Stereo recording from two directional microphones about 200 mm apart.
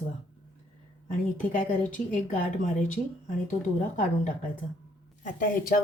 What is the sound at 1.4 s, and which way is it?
A woman's voice, 40° left (ahead or behind).